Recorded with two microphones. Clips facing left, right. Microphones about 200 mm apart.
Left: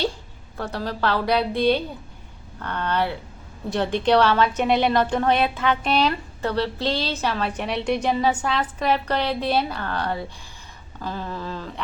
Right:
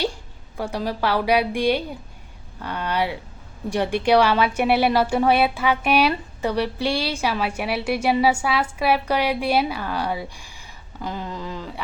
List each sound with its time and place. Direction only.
0.5 s a woman's voice: 10° right (ahead or behind)